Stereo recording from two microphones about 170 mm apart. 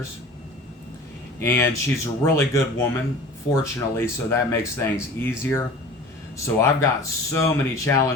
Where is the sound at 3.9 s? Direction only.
15° left (ahead or behind).